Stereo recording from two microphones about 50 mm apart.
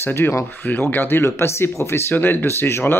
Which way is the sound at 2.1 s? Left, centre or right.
Left.